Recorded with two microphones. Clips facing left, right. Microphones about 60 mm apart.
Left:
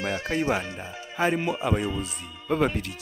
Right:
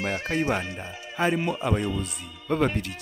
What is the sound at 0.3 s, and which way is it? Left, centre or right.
Speech, centre.